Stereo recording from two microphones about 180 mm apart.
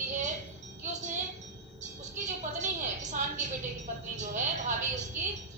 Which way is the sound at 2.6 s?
45° right (ahead or behind).